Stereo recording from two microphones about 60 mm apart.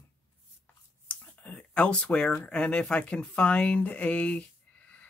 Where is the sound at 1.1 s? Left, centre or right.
Left.